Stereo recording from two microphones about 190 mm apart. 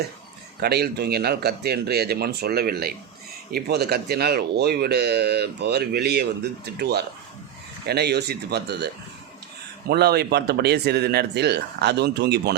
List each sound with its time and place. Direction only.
0.6 s speech: 55° right (ahead or behind)